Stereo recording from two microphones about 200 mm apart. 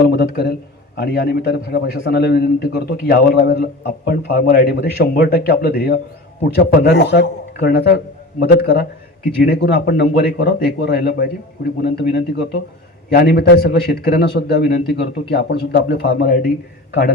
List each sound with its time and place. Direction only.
0.1 s a man's voice: 55° left (ahead or behind)